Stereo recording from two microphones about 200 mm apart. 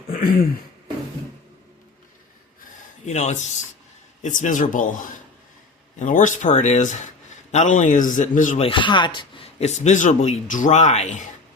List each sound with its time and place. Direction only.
0.1 s speech: 45° left (ahead or behind)
2.7 s a sound: 35° left (ahead or behind)
4.2 s a man's voice: 40° left (ahead or behind)
6.0 s a man's voice: 40° left (ahead or behind)
8.6 s a man's voice: 25° left (ahead or behind)